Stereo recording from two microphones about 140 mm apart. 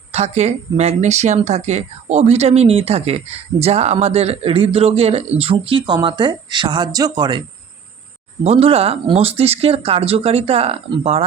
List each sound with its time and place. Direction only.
0.1 s a man's voice: 50° right (ahead or behind); by 7.4 s 30° right (ahead or behind)
8.4 s speech: 45° right (ahead or behind)